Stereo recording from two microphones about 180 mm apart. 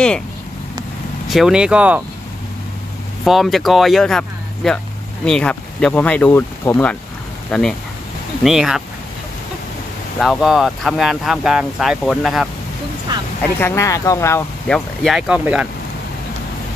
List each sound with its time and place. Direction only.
1.3 s speech: 5° right (ahead or behind)
3.3 s speech: centre (ahead or behind)
10.1 s speech: centre (ahead or behind)
13.4 s speech: 15° left (ahead or behind)
14.7 s speech: centre (ahead or behind)